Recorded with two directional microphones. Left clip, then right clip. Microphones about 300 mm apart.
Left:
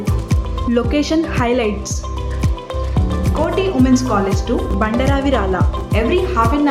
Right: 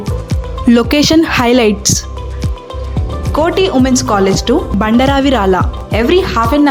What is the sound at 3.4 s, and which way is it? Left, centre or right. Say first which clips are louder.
Speech: right 5 dB; right.